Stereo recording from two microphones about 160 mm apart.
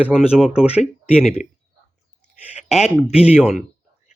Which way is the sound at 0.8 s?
45° left (ahead or behind).